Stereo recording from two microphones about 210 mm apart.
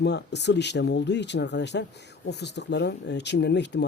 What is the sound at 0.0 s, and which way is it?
Speech, 55° left (ahead or behind).